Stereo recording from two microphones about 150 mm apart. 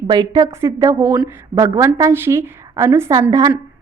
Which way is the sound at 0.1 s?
25° right (ahead or behind).